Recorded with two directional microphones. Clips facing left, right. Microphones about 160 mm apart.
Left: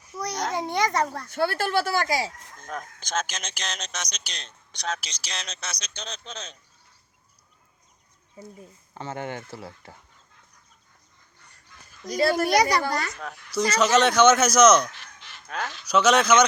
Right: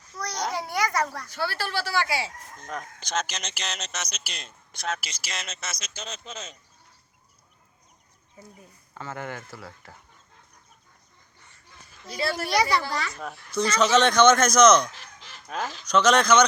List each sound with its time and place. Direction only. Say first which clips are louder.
0.0 s a sound: left 2 dB; 15° left (ahead or behind)
0.5 s speech: left 3 dB; 20° left (ahead or behind)
1.3 s a child's voice: left 6 dB; 50° left (ahead or behind)
2.6 s speech: even; centre (ahead or behind)
9.0 s speech: left 2 dB; 20° left (ahead or behind)
12.0 s a child's voice: left 7 dB; 45° left (ahead or behind)
13.3 s a man's voice: left 1 dB; 10° left (ahead or behind)
14.9 s honk: right 1 dB; 40° right (ahead or behind)
15.4 s speech: right 1 dB; 5° right (ahead or behind)
15.8 s a man's voice: even; 10° left (ahead or behind)